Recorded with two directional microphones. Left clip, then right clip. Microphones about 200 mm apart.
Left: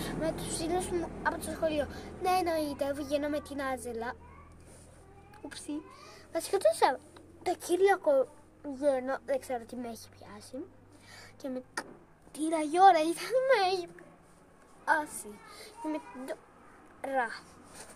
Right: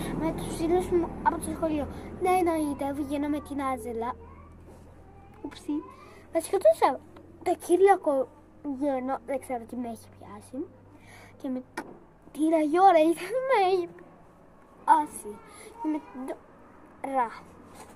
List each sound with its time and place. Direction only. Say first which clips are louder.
0.0 s speech: right 3 dB; 10° left (ahead or behind)
5.5 s a woman's voice: right 7 dB; 15° left (ahead or behind)
14.9 s a child's voice: right 7 dB; 10° left (ahead or behind)